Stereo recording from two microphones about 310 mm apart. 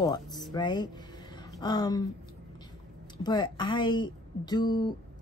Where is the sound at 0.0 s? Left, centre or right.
Centre.